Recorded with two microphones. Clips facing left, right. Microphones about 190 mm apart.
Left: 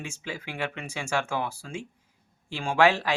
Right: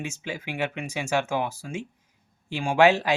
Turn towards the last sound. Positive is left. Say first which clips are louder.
# right 3 dB
turn(degrees=-20)  # may be behind; listen again after turning